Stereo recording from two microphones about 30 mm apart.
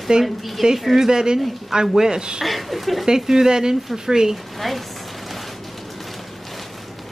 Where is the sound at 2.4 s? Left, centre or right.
Centre.